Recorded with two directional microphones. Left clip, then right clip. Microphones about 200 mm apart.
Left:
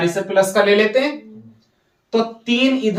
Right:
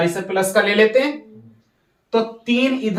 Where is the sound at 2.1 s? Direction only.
15° right (ahead or behind).